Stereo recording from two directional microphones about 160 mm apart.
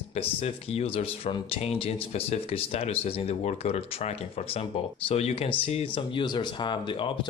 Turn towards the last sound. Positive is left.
turn(degrees=30)  # may be behind; listen again after turning